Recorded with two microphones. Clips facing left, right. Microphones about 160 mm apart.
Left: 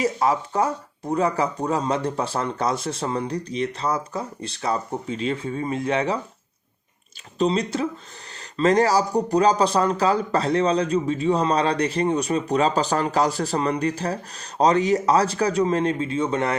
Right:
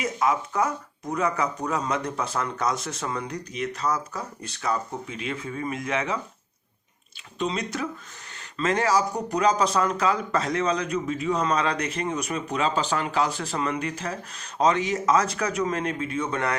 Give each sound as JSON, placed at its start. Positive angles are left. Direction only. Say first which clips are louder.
{"t": 0.0, "sound": "speech", "louder": "left 3 dB", "side_deg": 35}
{"t": 7.3, "sound": "speech", "louder": "left 6 dB", "side_deg": 35}